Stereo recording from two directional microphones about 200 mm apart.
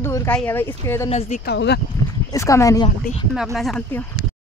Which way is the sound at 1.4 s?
55° left (ahead or behind).